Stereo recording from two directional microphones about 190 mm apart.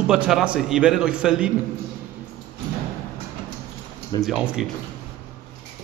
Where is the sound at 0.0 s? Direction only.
5° right (ahead or behind).